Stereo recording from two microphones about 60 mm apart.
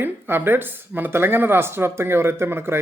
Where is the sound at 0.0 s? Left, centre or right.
Right.